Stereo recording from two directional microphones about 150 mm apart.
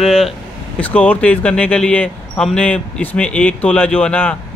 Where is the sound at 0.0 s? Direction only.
Centre (ahead or behind).